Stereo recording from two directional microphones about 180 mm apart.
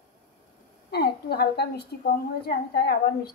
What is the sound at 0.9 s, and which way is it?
A woman's voice, 60° left (ahead or behind).